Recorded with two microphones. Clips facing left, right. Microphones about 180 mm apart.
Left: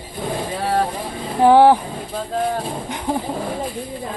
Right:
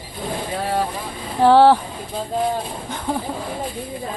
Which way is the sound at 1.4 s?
15° left (ahead or behind).